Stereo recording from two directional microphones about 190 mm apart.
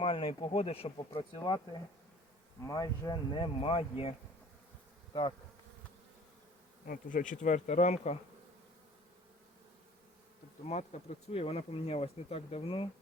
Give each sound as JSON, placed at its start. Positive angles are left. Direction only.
{"t": 0.0, "sound": "speech", "side_deg": 30}
{"t": 6.8, "sound": "speech", "side_deg": 45}
{"t": 10.7, "sound": "speech", "side_deg": 35}